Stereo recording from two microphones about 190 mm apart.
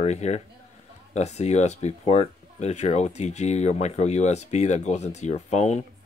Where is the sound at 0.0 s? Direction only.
35° left (ahead or behind).